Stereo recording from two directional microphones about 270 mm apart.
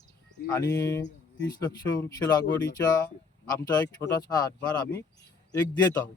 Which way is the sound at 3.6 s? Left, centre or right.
Centre.